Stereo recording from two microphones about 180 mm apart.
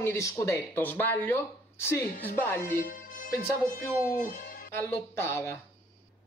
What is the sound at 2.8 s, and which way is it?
Music, 50° left (ahead or behind).